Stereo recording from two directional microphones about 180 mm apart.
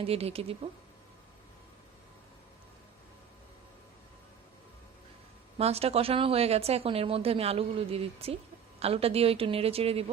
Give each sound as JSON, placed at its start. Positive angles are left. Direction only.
{"t": 0.0, "sound": "a woman's voice", "side_deg": -35}
{"t": 5.5, "sound": "a woman's voice", "side_deg": -35}